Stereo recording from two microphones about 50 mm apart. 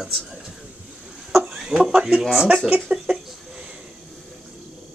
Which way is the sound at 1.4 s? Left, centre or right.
Centre.